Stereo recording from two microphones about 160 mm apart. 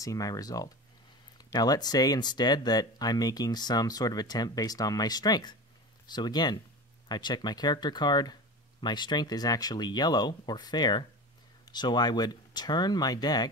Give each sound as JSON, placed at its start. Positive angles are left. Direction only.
{"t": 0.0, "sound": "speech", "side_deg": 20}